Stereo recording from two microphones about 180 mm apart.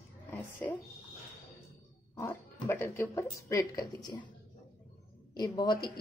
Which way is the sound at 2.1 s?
15° left (ahead or behind).